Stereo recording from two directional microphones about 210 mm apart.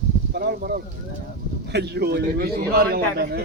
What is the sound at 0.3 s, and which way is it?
A man's voice, 50° right (ahead or behind).